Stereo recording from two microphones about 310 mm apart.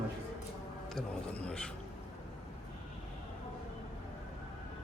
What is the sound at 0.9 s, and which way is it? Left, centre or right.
Speech, centre.